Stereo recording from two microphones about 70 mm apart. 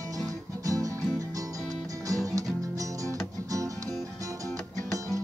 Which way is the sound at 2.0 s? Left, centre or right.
Right.